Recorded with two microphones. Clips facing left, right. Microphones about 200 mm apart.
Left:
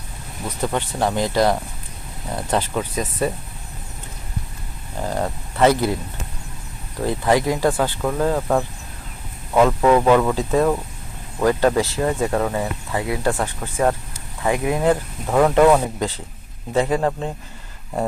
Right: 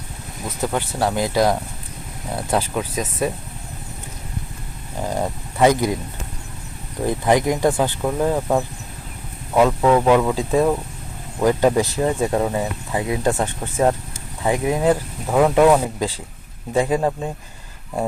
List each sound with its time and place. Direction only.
0.4 s speech: 5° right (ahead or behind)
5.0 s speech: 15° right (ahead or behind)
7.0 s speech: 15° right (ahead or behind)
9.6 s speech: centre (ahead or behind)